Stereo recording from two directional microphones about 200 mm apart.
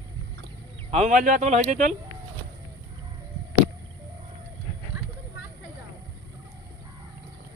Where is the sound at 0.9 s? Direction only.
35° right (ahead or behind).